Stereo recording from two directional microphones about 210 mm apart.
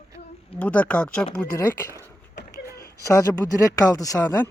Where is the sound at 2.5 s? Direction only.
50° left (ahead or behind).